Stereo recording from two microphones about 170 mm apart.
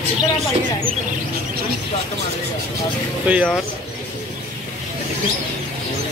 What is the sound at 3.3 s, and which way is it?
Speech, 10° right (ahead or behind).